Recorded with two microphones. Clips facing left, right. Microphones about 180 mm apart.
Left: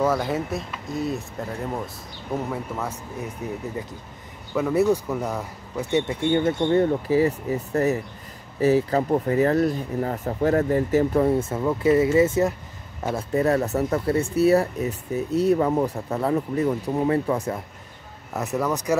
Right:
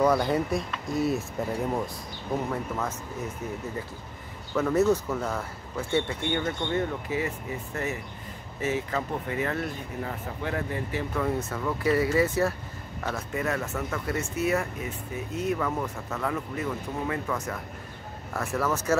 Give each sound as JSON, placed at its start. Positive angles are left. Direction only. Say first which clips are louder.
{"t": 0.0, "sound": "speech", "louder": "even", "side_deg": 5}
{"t": 2.5, "sound": "speech", "louder": "left 1 dB", "side_deg": 10}
{"t": 4.6, "sound": "speech", "louder": "left 2 dB", "side_deg": 10}
{"t": 6.3, "sound": "speech", "louder": "left 9 dB", "side_deg": 35}
{"t": 11.4, "sound": "speech", "louder": "left 6 dB", "side_deg": 25}
{"t": 13.0, "sound": "speech", "louder": "left 8 dB", "side_deg": 30}
{"t": 18.3, "sound": "speech", "louder": "left 3 dB", "side_deg": 20}